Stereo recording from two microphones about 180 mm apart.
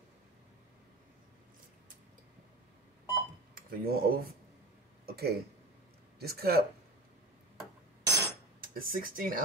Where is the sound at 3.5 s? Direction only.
55° right (ahead or behind).